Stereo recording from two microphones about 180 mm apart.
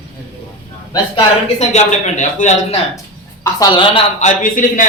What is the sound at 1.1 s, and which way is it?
Speech, 40° left (ahead or behind).